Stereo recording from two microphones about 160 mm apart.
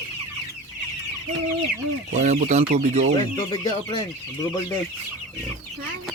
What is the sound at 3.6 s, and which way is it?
Speech, 35° left (ahead or behind).